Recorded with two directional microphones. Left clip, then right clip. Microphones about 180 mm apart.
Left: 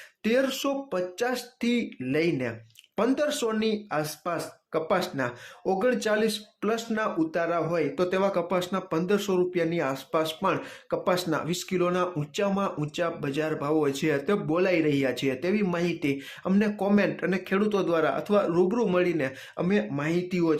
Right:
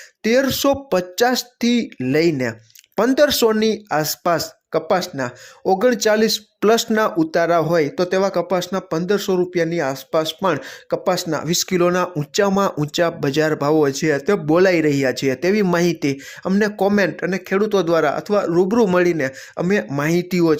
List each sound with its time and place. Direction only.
0.2 s speech: 40° right (ahead or behind)
8.0 s speech: 30° right (ahead or behind)